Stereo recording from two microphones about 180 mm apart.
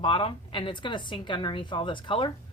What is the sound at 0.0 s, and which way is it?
A woman's voice, 30° left (ahead or behind).